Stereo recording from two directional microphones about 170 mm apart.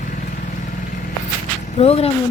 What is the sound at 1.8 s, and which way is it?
Speech, 35° left (ahead or behind).